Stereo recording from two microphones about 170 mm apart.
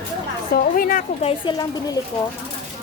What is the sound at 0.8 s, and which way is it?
Speech, 55° left (ahead or behind).